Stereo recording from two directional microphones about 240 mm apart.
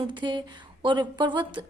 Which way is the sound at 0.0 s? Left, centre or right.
Centre.